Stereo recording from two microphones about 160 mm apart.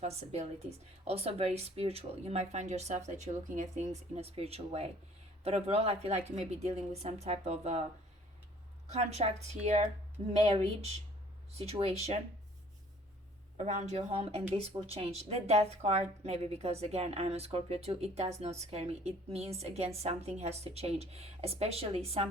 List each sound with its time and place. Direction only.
0.0 s a woman's voice: 40° right (ahead or behind)
8.9 s a woman's voice: 40° right (ahead or behind)
13.6 s a woman's voice: 50° right (ahead or behind)